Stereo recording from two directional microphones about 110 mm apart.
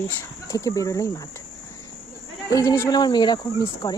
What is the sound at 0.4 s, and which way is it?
Speech, 30° left (ahead or behind).